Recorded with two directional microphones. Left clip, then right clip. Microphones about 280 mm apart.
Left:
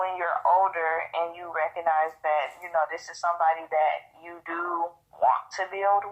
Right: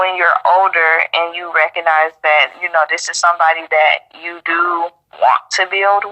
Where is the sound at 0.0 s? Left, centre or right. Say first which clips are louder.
Right 13 dB; right.